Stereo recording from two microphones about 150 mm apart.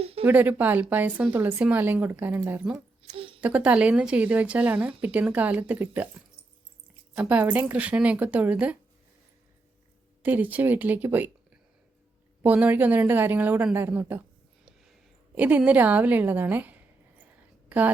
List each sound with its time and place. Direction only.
0.0 s a sound: 40° right (ahead or behind)
0.3 s a woman's voice: 10° right (ahead or behind)
3.2 s a sound: 35° right (ahead or behind)
3.4 s a woman's voice: 10° right (ahead or behind)
7.2 s a woman's voice: 10° right (ahead or behind)
10.2 s a woman's voice: 10° right (ahead or behind)
12.4 s a woman's voice: 10° right (ahead or behind)
15.4 s a woman's voice: 10° right (ahead or behind)
17.7 s a sound: 10° right (ahead or behind)